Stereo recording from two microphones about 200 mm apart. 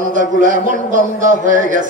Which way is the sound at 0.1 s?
40° right (ahead or behind).